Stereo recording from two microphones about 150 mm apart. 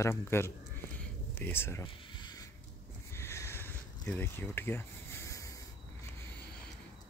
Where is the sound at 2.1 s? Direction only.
30° left (ahead or behind).